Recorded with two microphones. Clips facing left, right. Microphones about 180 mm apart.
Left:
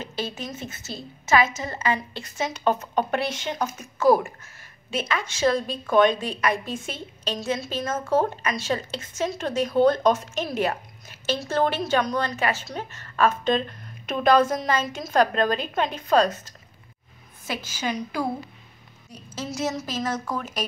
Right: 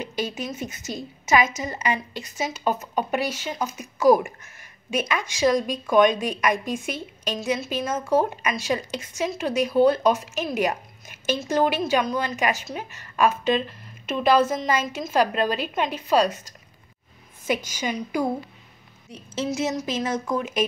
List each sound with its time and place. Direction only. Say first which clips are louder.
0.0 s a woman's voice: right 3 dB; 15° right (ahead or behind)
17.6 s a woman's voice: even; 15° right (ahead or behind)
19.5 s a woman's voice: right 1 dB; 15° right (ahead or behind)